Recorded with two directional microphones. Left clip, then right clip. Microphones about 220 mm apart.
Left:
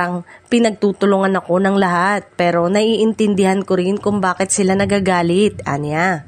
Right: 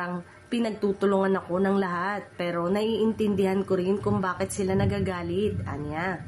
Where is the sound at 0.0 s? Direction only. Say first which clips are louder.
Left 12 dB; 45° left (ahead or behind).